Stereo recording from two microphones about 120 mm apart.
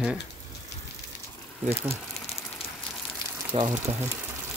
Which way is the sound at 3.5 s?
60° right (ahead or behind).